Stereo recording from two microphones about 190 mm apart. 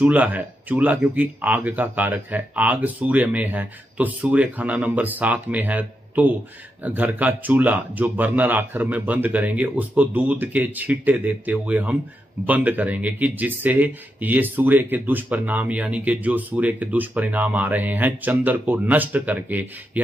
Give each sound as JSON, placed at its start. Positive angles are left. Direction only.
{"t": 0.0, "sound": "speech", "side_deg": -10}